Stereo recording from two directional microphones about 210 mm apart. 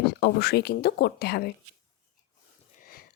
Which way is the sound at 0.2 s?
50° left (ahead or behind).